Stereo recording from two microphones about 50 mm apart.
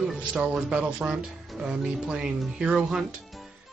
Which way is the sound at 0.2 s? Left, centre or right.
Right.